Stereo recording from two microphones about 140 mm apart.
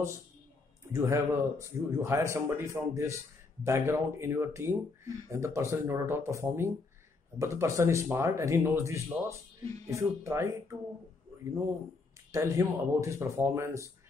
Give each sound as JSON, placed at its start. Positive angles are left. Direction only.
{"t": 0.9, "sound": "speech", "side_deg": -20}
{"t": 12.3, "sound": "speech", "side_deg": -20}